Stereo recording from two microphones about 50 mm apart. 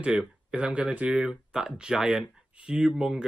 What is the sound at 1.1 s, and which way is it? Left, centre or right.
Speech, centre.